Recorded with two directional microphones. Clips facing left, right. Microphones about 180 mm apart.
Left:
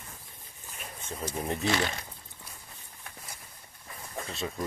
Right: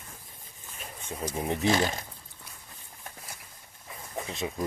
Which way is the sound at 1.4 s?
15° right (ahead or behind).